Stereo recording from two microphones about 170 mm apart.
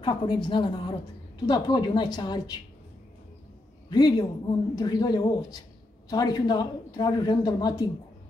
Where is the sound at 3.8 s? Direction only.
25° left (ahead or behind).